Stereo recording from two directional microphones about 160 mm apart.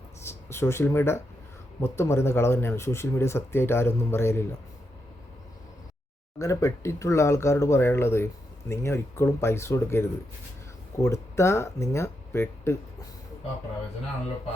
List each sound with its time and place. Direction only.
0.2 s speech: 15° left (ahead or behind)
6.4 s speech: 20° left (ahead or behind)